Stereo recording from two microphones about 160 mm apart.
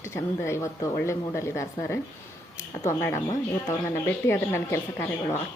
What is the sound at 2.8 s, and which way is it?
A woman's voice, 15° left (ahead or behind).